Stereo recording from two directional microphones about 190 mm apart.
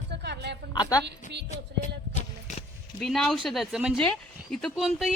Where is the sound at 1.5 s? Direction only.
40° left (ahead or behind).